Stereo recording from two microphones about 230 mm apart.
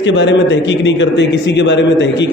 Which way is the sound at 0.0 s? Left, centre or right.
Left.